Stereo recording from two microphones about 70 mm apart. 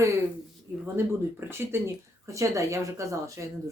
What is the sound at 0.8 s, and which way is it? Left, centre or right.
Speech, right.